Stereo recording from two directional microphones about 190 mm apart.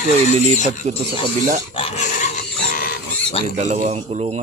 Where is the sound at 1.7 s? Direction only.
30° left (ahead or behind).